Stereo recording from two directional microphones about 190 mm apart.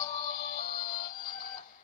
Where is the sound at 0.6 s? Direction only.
50° left (ahead or behind).